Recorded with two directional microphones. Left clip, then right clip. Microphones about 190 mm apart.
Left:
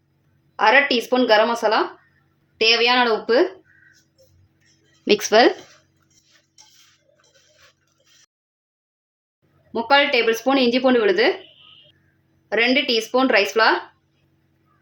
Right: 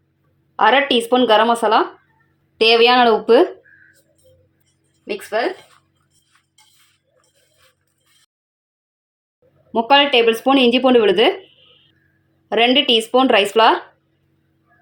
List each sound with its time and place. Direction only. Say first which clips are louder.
0.5 s speech: right 2 dB; 30° right (ahead or behind)
5.0 s speech: left 7 dB; 60° left (ahead or behind)
9.7 s speech: right 4 dB; 30° right (ahead or behind)
12.5 s speech: right 4 dB; 25° right (ahead or behind)